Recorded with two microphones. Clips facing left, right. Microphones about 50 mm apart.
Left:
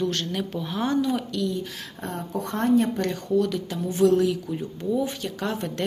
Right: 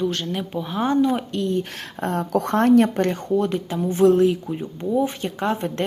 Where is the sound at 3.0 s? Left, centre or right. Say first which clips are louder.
Right 3 dB; right.